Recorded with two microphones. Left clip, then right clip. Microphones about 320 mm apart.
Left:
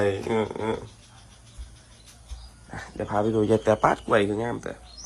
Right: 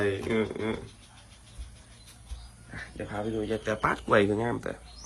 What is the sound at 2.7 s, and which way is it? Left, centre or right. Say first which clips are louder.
Cricket: left 9 dB; centre.